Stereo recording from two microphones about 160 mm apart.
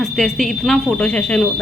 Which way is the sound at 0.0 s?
Centre (ahead or behind).